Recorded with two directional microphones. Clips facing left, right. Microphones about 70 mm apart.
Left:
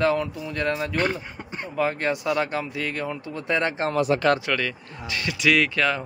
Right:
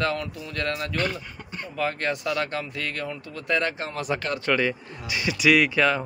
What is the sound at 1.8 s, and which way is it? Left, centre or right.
Speech, centre.